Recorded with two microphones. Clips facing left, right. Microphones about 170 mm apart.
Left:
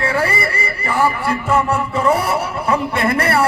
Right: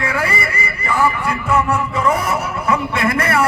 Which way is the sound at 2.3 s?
35° left (ahead or behind).